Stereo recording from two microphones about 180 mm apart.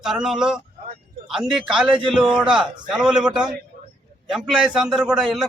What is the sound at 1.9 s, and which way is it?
Speech, 30° right (ahead or behind).